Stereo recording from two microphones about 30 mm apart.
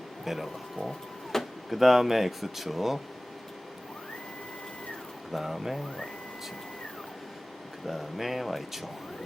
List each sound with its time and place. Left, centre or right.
0.3 s speech: centre
0.9 s printer: centre
1.7 s speech: centre
5.3 s speech: centre
7.9 s speech: centre